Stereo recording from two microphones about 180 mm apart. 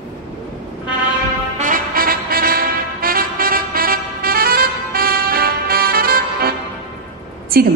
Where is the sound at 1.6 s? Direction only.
50° right (ahead or behind).